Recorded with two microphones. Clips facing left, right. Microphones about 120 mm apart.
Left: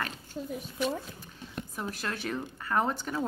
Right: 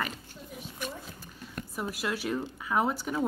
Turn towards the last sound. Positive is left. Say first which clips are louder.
# right 1 dB
turn(degrees=-5)  # may be behind; listen again after turning